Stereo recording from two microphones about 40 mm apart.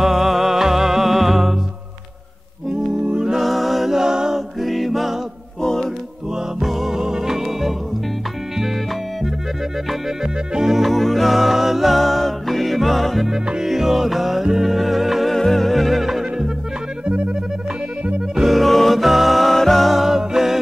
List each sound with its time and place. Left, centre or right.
0.0 s music: centre
2.7 s music: centre
4.6 s music: centre
5.6 s music: centre
6.6 s music: centre
10.2 s music: centre
10.9 s music: centre
15.3 s music: centre
17.0 s music: right
18.3 s music: centre
19.9 s music: centre